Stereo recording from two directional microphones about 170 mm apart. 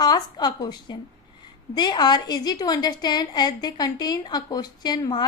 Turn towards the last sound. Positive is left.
turn(degrees=25)  # may be behind; listen again after turning